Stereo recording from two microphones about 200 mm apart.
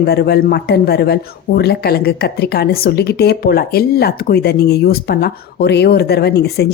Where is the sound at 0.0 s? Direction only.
50° left (ahead or behind).